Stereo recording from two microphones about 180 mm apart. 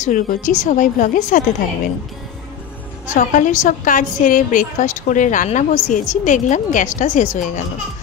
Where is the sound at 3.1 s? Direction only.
45° left (ahead or behind).